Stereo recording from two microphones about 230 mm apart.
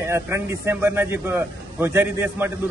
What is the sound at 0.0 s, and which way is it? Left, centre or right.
A man's voice, centre.